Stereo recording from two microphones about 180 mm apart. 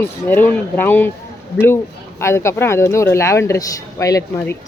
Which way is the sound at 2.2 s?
15° left (ahead or behind).